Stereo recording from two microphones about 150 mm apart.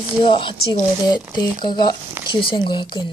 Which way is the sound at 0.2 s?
35° left (ahead or behind).